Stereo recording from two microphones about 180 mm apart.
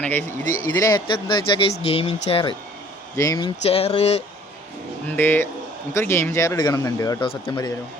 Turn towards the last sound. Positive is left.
turn(degrees=20)  # may be behind; listen again after turning